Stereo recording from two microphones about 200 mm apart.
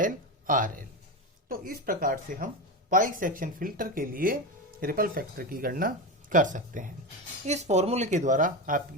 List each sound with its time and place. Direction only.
0.0 s speech: 40° right (ahead or behind)